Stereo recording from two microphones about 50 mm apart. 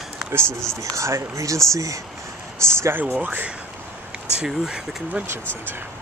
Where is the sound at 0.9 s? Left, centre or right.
Right.